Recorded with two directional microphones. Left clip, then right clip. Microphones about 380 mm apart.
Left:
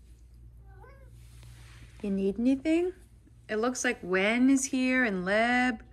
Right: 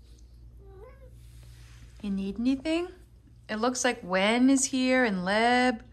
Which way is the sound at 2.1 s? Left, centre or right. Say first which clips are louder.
Left 2 dB; centre.